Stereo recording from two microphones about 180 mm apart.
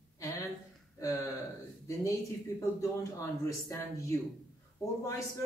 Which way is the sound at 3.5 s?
15° left (ahead or behind).